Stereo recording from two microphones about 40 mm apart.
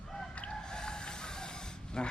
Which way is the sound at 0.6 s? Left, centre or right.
Centre.